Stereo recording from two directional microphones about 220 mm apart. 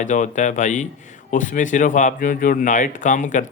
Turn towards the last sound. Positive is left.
turn(degrees=35)  # may be behind; listen again after turning